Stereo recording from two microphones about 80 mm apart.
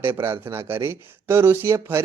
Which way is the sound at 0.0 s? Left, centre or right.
Right.